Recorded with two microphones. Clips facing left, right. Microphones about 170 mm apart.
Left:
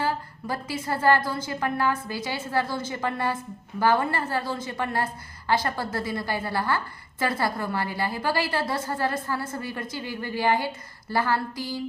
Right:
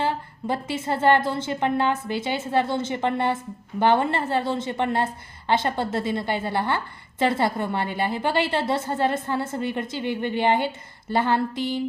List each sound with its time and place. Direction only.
0.0 s a woman's voice: 25° right (ahead or behind)